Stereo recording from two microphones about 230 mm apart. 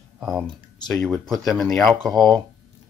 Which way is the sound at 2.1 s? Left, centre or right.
Centre.